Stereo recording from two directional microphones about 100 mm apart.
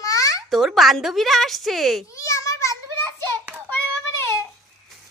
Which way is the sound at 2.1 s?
35° left (ahead or behind).